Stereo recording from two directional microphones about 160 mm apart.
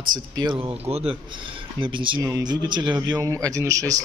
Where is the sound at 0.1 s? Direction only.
30° right (ahead or behind).